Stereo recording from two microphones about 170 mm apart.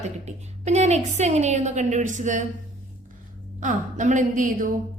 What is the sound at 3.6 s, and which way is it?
A woman's voice, 45° right (ahead or behind).